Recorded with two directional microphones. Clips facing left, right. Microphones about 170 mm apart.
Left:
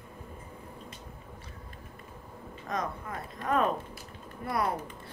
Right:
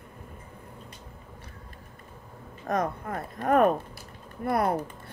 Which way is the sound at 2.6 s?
55° right (ahead or behind).